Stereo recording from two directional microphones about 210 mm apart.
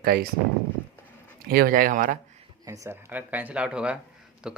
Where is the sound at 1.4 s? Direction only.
45° right (ahead or behind).